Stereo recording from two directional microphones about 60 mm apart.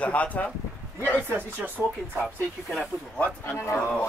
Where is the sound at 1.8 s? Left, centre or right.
Right.